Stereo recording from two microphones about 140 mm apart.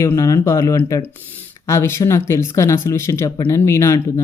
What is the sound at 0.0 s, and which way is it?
Speech, 20° left (ahead or behind).